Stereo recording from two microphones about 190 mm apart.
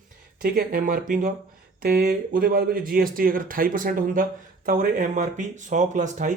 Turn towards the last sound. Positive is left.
turn(degrees=-40)  # may be behind; listen again after turning